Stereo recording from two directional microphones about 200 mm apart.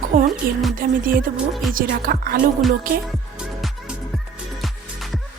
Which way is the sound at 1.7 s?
45° right (ahead or behind).